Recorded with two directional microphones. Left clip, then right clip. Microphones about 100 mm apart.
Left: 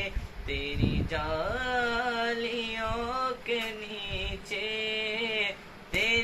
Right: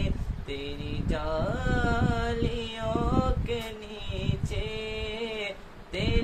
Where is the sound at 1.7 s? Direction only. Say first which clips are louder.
Left 1 dB; 40° right (ahead or behind).